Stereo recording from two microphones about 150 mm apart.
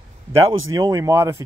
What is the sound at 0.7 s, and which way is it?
Speech, 25° right (ahead or behind).